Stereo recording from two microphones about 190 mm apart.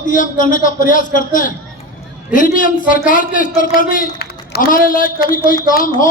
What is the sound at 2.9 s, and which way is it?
A man's voice, 45° left (ahead or behind).